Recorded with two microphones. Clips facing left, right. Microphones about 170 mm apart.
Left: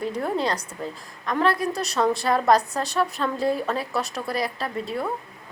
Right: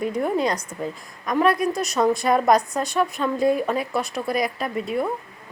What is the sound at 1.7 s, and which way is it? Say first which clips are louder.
Speech: right 3 dB; 35° left (ahead or behind).